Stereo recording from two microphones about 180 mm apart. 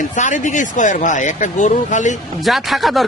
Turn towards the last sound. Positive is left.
turn(degrees=0)  # may be behind; listen again after turning